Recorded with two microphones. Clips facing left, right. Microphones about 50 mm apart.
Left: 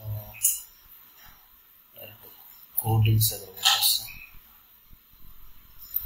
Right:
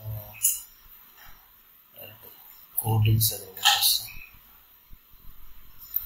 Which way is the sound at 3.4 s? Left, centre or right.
Right.